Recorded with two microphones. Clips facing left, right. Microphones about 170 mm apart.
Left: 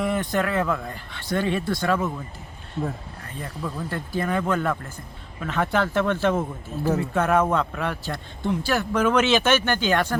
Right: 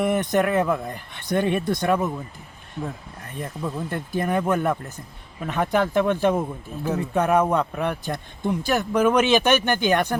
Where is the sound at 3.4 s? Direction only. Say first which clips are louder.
Right 2 dB; 20° right (ahead or behind).